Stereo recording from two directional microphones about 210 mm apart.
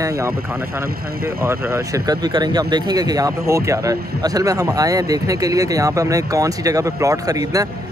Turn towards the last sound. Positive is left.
turn(degrees=-15)  # may be behind; listen again after turning